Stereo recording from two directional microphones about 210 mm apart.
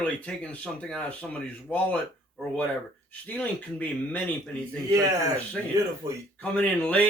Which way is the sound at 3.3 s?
10° left (ahead or behind).